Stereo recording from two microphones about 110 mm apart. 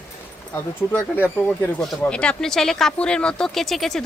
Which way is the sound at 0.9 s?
20° left (ahead or behind).